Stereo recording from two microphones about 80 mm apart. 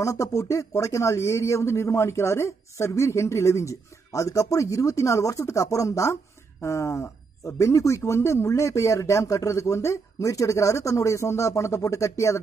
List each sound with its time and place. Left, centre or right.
0.0 s speech: left